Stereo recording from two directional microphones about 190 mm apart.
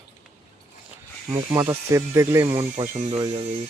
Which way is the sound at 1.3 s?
15° right (ahead or behind).